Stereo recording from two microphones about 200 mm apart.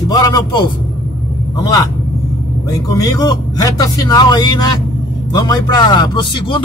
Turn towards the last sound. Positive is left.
turn(degrees=25)  # may be behind; listen again after turning